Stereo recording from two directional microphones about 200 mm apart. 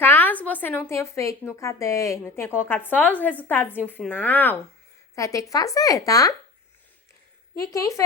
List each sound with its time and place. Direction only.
0.0 s a woman's voice: 10° left (ahead or behind)
7.6 s a woman's voice: 15° left (ahead or behind)